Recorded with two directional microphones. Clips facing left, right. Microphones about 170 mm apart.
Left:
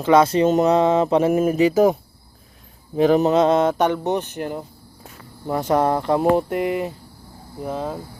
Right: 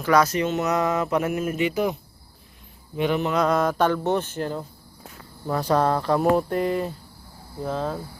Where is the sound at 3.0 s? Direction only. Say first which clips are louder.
Left 7 dB; 35° left (ahead or behind); by 8.0 s 15° left (ahead or behind).